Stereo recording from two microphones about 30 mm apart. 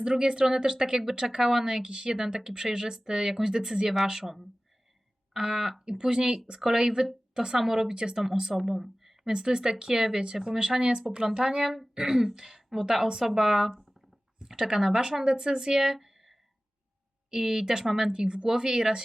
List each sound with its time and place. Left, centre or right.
0.0 s a woman's voice: right
5.3 s a woman's voice: centre
6.3 s a woman's voice: centre
7.9 s a woman's voice: right
8.2 s speech: centre
8.5 s a sound: centre
9.3 s a woman's voice: right
16.0 s a sound: centre
17.3 s a woman's voice: centre